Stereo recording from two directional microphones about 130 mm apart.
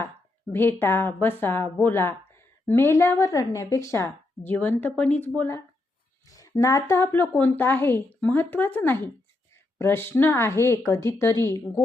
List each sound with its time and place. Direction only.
0.5 s speech: 15° left (ahead or behind)